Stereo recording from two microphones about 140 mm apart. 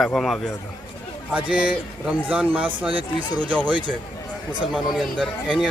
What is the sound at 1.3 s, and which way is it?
Speech, 10° right (ahead or behind).